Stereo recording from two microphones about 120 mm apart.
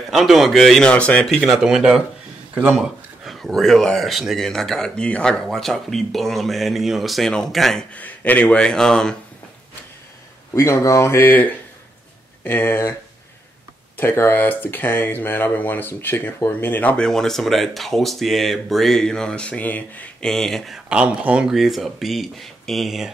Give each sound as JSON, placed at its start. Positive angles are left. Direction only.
{"t": 0.1, "sound": "speech", "side_deg": 0}
{"t": 1.4, "sound": "speech", "side_deg": -5}
{"t": 2.5, "sound": "speech", "side_deg": -15}
{"t": 3.3, "sound": "speech", "side_deg": 0}
{"t": 10.5, "sound": "speech", "side_deg": 25}
{"t": 13.9, "sound": "speech", "side_deg": 20}